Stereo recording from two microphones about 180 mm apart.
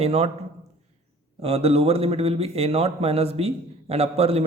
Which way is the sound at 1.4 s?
35° right (ahead or behind).